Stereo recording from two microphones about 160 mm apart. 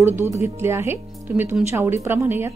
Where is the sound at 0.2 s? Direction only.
15° right (ahead or behind).